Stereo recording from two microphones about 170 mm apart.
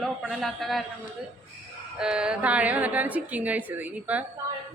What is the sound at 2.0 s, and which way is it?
A man's voice, 5° right (ahead or behind).